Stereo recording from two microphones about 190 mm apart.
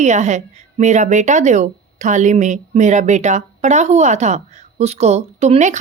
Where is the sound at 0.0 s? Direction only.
35° right (ahead or behind).